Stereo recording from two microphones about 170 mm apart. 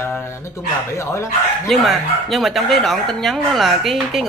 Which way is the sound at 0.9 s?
15° left (ahead or behind).